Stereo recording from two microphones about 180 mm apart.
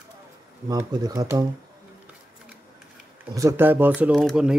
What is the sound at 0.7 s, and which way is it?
Speech, 20° right (ahead or behind).